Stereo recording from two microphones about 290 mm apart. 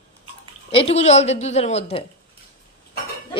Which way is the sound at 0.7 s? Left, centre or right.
Centre.